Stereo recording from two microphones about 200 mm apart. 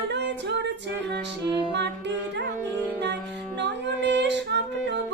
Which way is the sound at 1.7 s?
60° right (ahead or behind).